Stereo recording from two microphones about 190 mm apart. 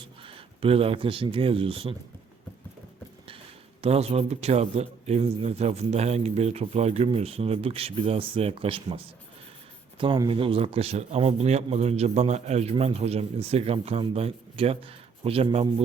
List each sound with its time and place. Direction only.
0.0 s speech: 30° right (ahead or behind)
3.8 s a man's voice: 35° right (ahead or behind)
10.0 s a man's voice: 25° right (ahead or behind)